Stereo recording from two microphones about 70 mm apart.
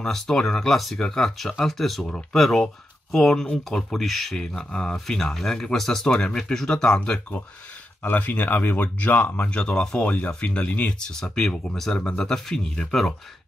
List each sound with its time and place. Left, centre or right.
0.0 s speech: centre
8.0 s speech: left; by 13.1 s centre